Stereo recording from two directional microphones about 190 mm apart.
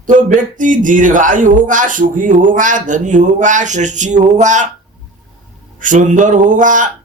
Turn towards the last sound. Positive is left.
turn(degrees=-45)  # may be behind; listen again after turning